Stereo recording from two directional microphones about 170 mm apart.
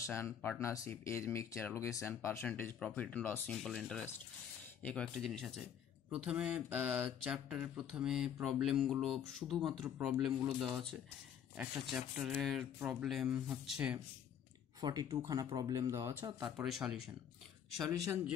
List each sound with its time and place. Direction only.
0.0 s speech: 15° left (ahead or behind); by 13.9 s 5° right (ahead or behind)
14.8 s speech: 25° right (ahead or behind)
16.4 s speech: centre (ahead or behind)